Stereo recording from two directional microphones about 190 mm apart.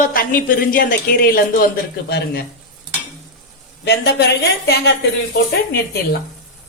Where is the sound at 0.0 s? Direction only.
45° left (ahead or behind).